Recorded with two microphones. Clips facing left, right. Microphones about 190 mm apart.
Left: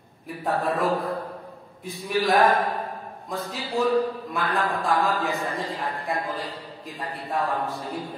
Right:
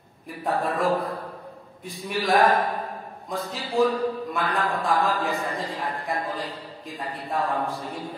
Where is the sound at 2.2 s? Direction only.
Centre (ahead or behind).